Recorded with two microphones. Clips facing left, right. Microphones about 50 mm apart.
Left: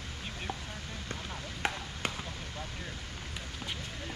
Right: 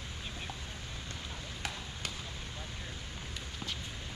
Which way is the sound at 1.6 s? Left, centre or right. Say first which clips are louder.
Left 8 dB; left.